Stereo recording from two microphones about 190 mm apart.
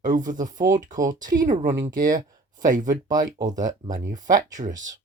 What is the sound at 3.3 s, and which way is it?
Speech, 20° right (ahead or behind).